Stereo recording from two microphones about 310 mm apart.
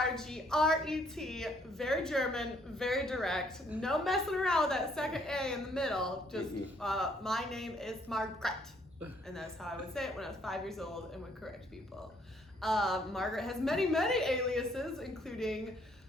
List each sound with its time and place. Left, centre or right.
0.0 s a woman's voice: centre
12.6 s a woman's voice: centre